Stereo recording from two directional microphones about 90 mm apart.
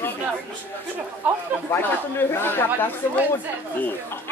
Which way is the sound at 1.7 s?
25° left (ahead or behind).